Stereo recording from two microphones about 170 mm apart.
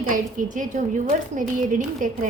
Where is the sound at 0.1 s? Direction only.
50° right (ahead or behind).